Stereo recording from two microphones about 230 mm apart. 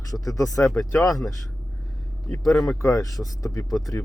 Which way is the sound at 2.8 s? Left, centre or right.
Centre.